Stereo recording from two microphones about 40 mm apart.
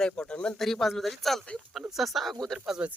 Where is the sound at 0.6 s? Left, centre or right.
Centre.